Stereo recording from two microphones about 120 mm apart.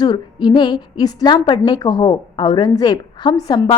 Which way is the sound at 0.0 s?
35° left (ahead or behind).